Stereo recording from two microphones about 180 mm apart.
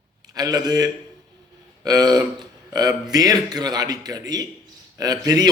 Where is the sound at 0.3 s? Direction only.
20° right (ahead or behind).